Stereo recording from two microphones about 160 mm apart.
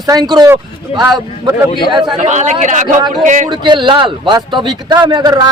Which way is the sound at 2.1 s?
50° right (ahead or behind).